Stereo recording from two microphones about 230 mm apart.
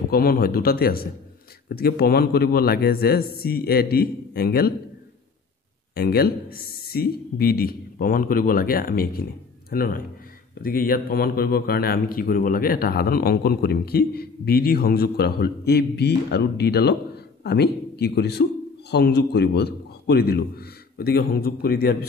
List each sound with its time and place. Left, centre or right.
0.1 s a man's voice: left
5.9 s a man's voice: left